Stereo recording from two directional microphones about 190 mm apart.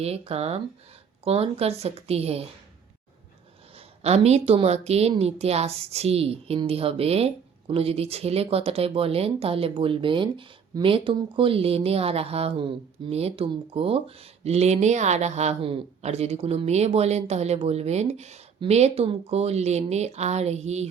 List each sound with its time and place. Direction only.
0.0 s a woman's voice: 35° right (ahead or behind)
4.0 s a woman's voice: 35° right (ahead or behind)